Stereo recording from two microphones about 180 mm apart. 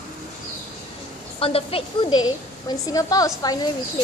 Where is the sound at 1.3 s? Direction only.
30° left (ahead or behind).